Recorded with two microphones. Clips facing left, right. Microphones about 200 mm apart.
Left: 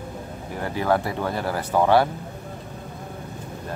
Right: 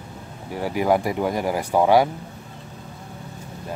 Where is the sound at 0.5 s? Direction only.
10° right (ahead or behind).